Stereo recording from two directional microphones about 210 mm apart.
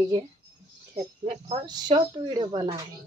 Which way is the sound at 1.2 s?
30° right (ahead or behind).